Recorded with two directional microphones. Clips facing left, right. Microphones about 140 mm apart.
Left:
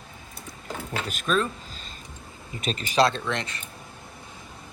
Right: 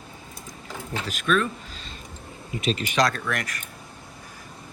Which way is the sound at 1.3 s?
35° left (ahead or behind).